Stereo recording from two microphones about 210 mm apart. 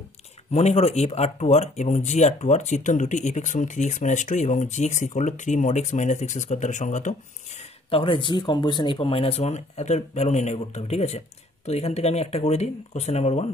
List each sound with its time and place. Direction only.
0.5 s speech: 30° left (ahead or behind)